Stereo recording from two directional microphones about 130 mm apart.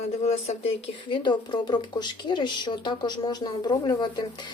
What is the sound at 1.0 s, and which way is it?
A woman's voice, 35° left (ahead or behind).